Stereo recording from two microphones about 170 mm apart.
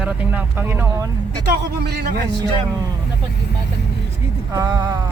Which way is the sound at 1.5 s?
75° right (ahead or behind).